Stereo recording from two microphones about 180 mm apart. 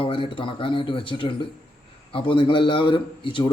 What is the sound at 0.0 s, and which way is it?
A man's voice, 30° left (ahead or behind).